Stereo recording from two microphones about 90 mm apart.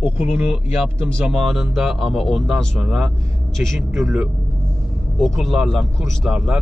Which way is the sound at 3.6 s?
20° right (ahead or behind).